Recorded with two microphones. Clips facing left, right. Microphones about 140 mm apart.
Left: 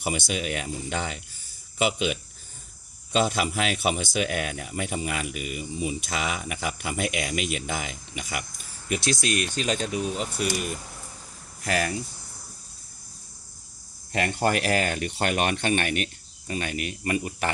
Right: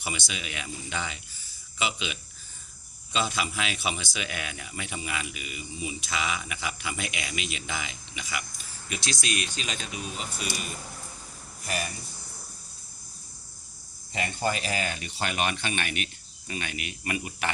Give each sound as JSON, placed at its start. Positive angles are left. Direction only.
{"t": 0.0, "sound": "speech", "side_deg": 50}
{"t": 11.6, "sound": "speech", "side_deg": 90}
{"t": 14.1, "sound": "speech", "side_deg": 75}